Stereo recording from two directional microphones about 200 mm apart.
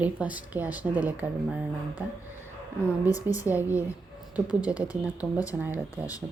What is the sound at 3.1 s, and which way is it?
Speech, 15° left (ahead or behind).